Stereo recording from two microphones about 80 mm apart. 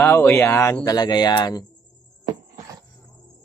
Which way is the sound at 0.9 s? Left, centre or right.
Left.